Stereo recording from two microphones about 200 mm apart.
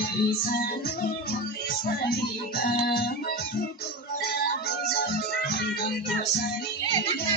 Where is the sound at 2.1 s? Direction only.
50° left (ahead or behind).